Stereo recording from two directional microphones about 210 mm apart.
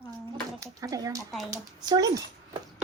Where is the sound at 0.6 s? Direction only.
15° right (ahead or behind).